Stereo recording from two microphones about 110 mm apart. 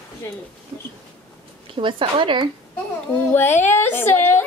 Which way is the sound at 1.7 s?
50° right (ahead or behind).